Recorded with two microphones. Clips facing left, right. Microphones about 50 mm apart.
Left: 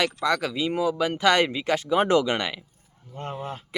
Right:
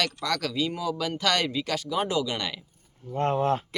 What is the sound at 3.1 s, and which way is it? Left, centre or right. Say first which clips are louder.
Speech: right 9 dB; right.